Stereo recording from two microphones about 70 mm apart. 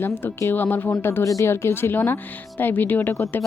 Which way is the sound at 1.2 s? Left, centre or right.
Left.